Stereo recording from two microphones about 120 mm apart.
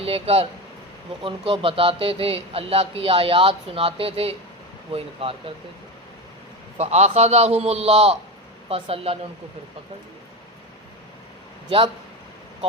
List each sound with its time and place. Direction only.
0.0 s speech: 55° right (ahead or behind)
6.7 s a man's voice: 65° right (ahead or behind)